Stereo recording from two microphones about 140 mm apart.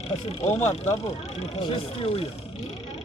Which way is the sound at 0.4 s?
50° left (ahead or behind).